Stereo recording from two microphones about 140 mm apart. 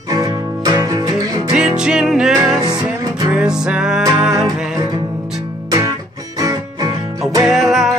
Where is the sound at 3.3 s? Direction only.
5° right (ahead or behind).